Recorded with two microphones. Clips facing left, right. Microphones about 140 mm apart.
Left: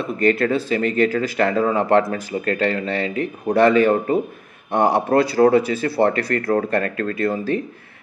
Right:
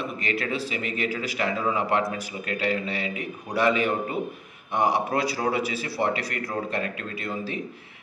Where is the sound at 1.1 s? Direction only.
50° left (ahead or behind).